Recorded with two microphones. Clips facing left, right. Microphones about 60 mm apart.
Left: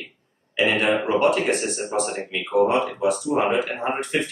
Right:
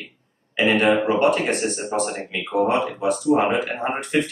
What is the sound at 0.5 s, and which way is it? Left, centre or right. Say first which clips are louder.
Speech: right 3 dB; centre.